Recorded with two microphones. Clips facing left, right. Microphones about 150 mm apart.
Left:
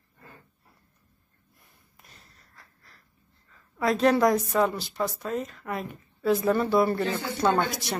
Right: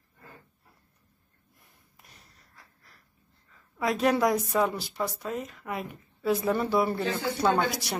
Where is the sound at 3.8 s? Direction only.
10° right (ahead or behind).